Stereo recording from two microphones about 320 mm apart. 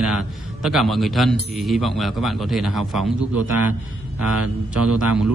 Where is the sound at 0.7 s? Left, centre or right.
Centre.